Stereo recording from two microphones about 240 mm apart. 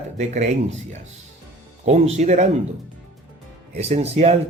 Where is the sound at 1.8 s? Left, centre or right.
Right.